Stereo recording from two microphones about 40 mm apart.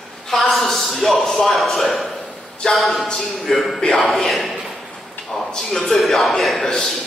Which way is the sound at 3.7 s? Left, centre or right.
Centre.